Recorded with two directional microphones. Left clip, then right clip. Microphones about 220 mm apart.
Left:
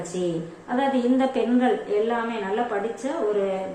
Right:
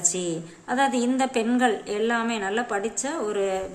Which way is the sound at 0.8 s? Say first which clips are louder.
Left 1 dB; 35° right (ahead or behind).